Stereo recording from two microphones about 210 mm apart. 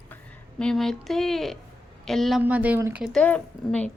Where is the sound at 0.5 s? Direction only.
5° left (ahead or behind).